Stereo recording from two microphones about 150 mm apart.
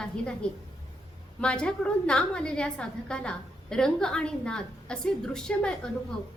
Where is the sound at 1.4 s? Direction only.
5° left (ahead or behind).